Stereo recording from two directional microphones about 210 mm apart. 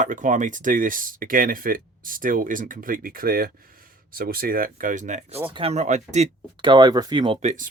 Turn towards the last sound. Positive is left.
turn(degrees=-35)  # may be behind; listen again after turning